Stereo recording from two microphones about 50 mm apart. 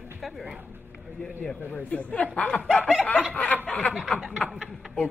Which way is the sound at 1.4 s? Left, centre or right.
Left.